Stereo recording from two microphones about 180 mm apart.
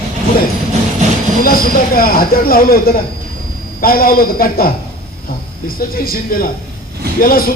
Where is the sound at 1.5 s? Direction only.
55° left (ahead or behind).